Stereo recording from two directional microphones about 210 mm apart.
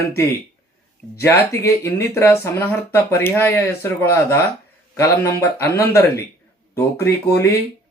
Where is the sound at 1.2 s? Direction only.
10° left (ahead or behind).